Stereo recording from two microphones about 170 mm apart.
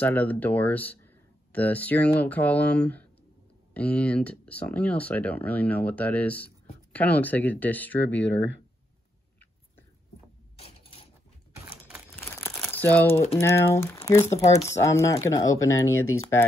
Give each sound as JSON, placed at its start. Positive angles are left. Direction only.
{"t": 0.0, "sound": "speech", "side_deg": 10}
{"t": 12.4, "sound": "crumpling", "side_deg": 10}
{"t": 13.4, "sound": "speech", "side_deg": 15}
{"t": 14.4, "sound": "speech", "side_deg": 40}
{"t": 14.7, "sound": "speech", "side_deg": 20}